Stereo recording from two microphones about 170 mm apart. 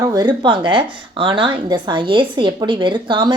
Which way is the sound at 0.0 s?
25° right (ahead or behind).